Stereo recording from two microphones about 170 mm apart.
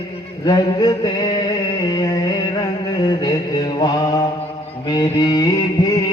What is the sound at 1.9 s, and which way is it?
Music, 20° left (ahead or behind).